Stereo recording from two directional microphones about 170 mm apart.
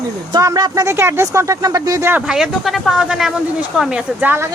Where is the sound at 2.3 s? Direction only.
5° right (ahead or behind).